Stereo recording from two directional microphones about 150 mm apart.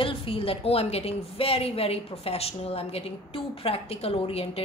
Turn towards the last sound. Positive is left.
turn(degrees=40)  # may be behind; listen again after turning